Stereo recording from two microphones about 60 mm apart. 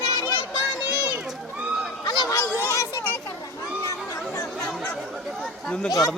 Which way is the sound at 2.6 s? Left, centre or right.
Left.